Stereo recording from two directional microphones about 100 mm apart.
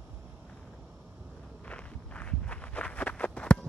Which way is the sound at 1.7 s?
15° left (ahead or behind).